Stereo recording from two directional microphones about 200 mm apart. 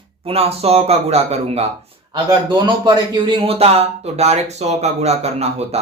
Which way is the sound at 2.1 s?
20° right (ahead or behind).